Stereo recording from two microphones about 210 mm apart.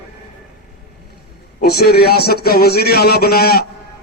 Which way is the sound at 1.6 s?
50° left (ahead or behind).